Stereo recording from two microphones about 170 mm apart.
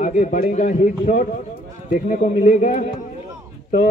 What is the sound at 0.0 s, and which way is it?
Speech, 45° left (ahead or behind).